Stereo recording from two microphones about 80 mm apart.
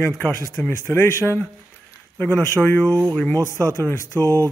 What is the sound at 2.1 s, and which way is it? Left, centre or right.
Speech, centre.